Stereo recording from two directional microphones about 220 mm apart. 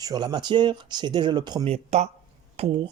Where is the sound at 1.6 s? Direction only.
30° right (ahead or behind).